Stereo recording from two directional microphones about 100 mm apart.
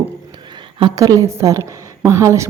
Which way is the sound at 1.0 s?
35° right (ahead or behind).